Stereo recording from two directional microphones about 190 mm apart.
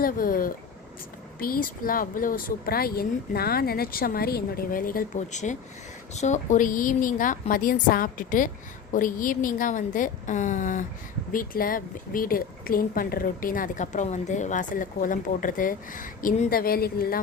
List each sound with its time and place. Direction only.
0.0 s speech: 50° left (ahead or behind)